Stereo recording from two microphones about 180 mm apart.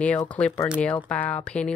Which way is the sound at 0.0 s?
10° left (ahead or behind).